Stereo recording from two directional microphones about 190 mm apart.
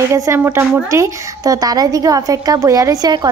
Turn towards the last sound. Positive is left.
turn(degrees=-20)  # may be behind; listen again after turning